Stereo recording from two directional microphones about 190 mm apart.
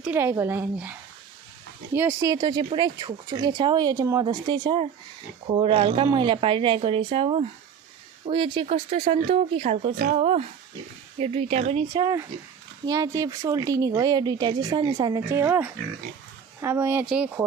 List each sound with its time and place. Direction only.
0.0 s speech: 10° right (ahead or behind); by 11.9 s 35° right (ahead or behind)
11.9 s speech: 20° right (ahead or behind)
15.3 s speech: 10° right (ahead or behind)